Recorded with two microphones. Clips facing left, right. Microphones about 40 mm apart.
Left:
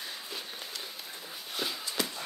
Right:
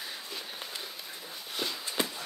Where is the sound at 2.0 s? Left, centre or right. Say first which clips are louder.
Right 2 dB; right.